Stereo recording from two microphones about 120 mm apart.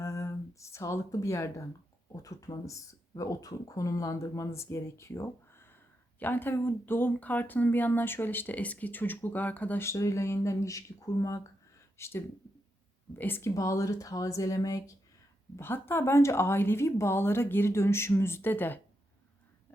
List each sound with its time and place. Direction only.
0.0 s speech: 25° left (ahead or behind)